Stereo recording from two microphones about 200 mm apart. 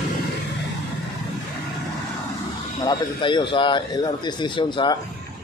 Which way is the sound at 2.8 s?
20° left (ahead or behind).